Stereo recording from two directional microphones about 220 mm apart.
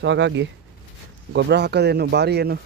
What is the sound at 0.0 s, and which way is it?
Speech, 55° right (ahead or behind).